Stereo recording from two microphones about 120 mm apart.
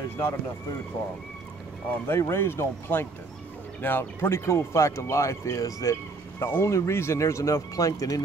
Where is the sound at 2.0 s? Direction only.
20° left (ahead or behind).